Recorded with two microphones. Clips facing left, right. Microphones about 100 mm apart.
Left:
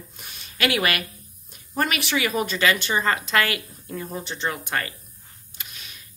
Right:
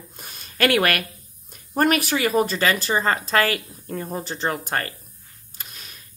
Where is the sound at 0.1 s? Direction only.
40° right (ahead or behind).